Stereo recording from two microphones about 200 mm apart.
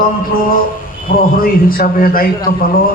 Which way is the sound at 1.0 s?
45° left (ahead or behind).